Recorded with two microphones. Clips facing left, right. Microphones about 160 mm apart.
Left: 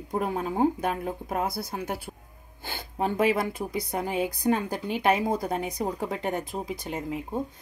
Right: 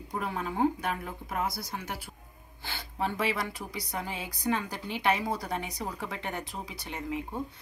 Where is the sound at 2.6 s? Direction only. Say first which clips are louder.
Left 4 dB; 45° left (ahead or behind).